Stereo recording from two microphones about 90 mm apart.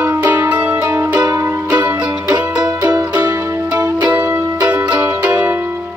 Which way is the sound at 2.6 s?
45° right (ahead or behind).